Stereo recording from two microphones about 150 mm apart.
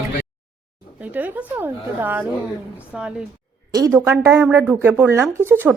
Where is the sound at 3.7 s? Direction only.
20° right (ahead or behind).